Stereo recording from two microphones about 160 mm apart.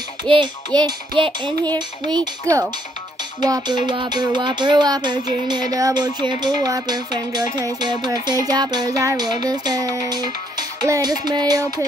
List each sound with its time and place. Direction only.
0.3 s music: 25° right (ahead or behind)